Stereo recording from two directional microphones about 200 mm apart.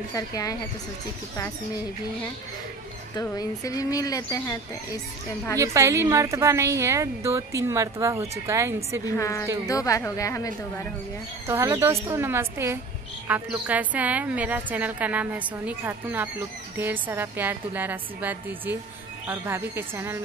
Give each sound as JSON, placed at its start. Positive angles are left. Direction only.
{"t": 0.1, "sound": "speech", "side_deg": 15}
{"t": 3.2, "sound": "speech", "side_deg": 20}
{"t": 5.6, "sound": "a woman's voice", "side_deg": -15}
{"t": 9.1, "sound": "speech", "side_deg": 15}
{"t": 11.4, "sound": "a woman's voice", "side_deg": -15}